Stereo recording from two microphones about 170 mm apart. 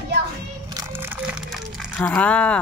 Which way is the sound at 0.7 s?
10° right (ahead or behind).